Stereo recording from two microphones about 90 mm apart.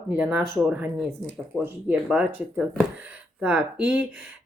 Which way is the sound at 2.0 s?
10° right (ahead or behind).